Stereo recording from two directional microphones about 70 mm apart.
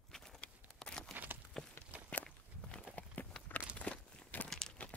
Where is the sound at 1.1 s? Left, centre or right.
Right.